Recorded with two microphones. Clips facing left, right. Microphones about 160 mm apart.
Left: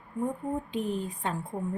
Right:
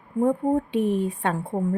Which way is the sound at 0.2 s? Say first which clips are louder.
Right 10 dB; 75° right (ahead or behind).